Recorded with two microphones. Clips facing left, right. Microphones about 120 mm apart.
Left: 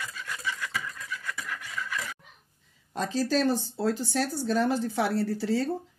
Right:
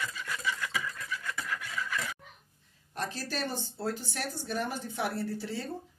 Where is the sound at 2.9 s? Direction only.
90° left.